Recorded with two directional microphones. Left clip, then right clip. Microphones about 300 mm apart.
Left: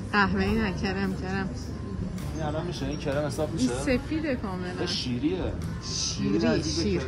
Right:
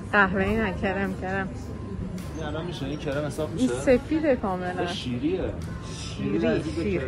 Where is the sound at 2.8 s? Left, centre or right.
Left.